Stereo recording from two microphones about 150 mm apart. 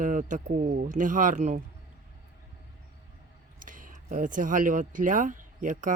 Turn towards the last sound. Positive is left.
turn(degrees=-60)  # may be behind; listen again after turning